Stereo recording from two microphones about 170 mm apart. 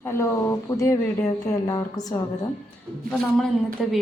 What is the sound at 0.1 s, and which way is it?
A woman's voice, 15° left (ahead or behind).